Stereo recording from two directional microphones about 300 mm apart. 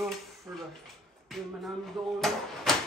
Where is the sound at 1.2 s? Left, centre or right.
Centre.